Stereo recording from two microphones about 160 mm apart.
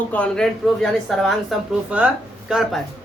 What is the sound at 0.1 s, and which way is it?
Speech, 5° left (ahead or behind).